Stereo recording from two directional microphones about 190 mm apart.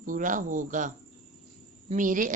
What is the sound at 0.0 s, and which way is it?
Speech, 45° right (ahead or behind).